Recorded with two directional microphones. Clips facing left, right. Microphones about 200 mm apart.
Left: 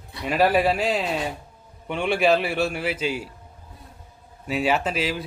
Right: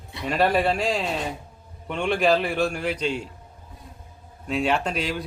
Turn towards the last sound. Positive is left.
turn(degrees=5)  # may be behind; listen again after turning